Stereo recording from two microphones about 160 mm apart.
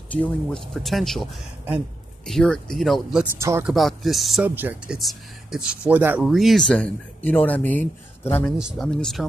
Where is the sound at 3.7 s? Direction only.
Centre (ahead or behind).